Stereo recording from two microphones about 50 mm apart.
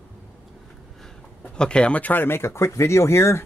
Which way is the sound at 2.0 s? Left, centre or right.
Left.